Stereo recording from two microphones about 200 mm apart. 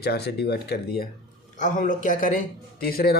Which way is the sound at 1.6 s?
40° left (ahead or behind).